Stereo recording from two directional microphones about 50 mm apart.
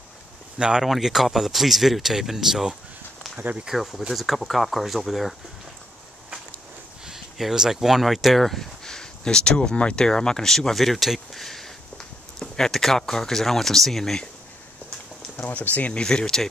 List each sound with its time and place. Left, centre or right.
0.6 s speech: centre
0.8 s speech: centre
3.3 s speech: right
3.7 s speech: centre
7.1 s speech: centre
15.5 s speech: left
15.9 s speech: centre